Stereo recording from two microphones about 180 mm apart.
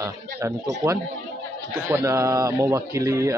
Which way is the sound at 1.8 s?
15° right (ahead or behind).